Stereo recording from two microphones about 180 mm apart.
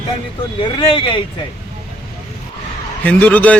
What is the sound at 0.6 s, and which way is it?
Speech, 25° left (ahead or behind).